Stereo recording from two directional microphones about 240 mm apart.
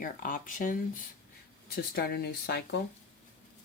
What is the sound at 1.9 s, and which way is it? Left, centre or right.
Speech, left.